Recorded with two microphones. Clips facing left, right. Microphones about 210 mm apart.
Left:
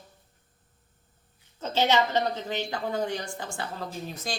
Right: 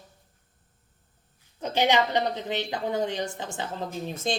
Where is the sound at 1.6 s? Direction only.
15° right (ahead or behind).